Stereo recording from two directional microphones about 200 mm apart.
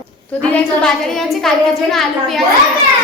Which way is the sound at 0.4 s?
5° left (ahead or behind).